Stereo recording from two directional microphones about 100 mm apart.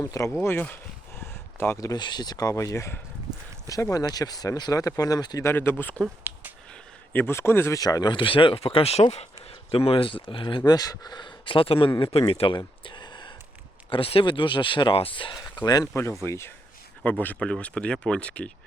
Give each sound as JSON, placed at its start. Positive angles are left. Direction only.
{"t": 0.3, "sound": "a sound", "side_deg": 20}
{"t": 1.9, "sound": "speech", "side_deg": 45}
{"t": 5.4, "sound": "a man's voice", "side_deg": 25}
{"t": 6.3, "sound": "a sound", "side_deg": -20}
{"t": 7.1, "sound": "a man's voice", "side_deg": 20}
{"t": 7.8, "sound": "speech", "side_deg": 40}
{"t": 8.1, "sound": "speech", "side_deg": 60}
{"t": 9.7, "sound": "speech", "side_deg": 70}
{"t": 10.7, "sound": "speech", "side_deg": 40}
{"t": 12.1, "sound": "a sound", "side_deg": 75}
{"t": 13.9, "sound": "speech", "side_deg": 70}
{"t": 16.2, "sound": "a man's voice", "side_deg": 25}